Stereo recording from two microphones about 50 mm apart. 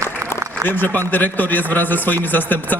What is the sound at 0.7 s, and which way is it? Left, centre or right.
A man's voice, left.